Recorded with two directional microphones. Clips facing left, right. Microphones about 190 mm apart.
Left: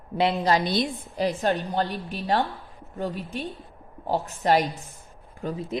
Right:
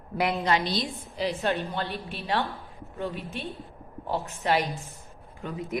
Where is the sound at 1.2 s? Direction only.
45° left (ahead or behind).